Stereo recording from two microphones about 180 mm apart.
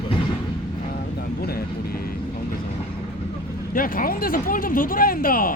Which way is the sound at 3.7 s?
50° left (ahead or behind).